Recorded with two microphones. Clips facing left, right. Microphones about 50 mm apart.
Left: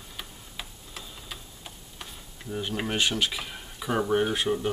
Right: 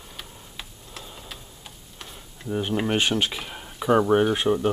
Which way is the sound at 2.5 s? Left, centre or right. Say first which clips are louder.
Right 6 dB; centre.